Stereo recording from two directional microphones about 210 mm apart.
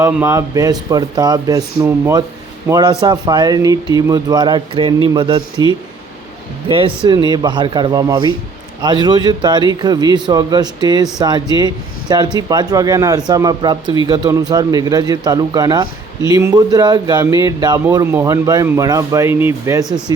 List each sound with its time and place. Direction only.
0.0 s a man's voice: 10° right (ahead or behind)
6.7 s a man's voice: 25° right (ahead or behind)